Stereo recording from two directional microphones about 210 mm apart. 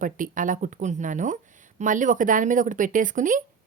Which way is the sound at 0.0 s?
40° right (ahead or behind).